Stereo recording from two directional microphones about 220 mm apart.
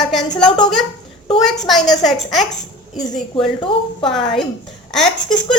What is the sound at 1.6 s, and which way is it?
Child singing, centre (ahead or behind).